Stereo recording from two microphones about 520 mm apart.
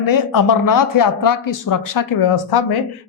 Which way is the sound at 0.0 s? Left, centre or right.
Left.